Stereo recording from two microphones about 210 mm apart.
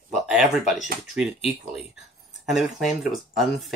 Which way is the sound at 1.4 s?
30° left (ahead or behind).